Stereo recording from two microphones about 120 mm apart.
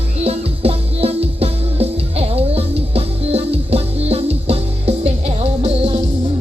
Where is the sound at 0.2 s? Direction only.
55° right (ahead or behind).